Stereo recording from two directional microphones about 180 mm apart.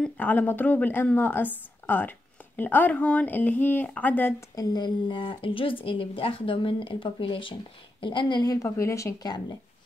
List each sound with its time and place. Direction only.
0.0 s speech: 10° left (ahead or behind)
4.7 s speech: 25° left (ahead or behind)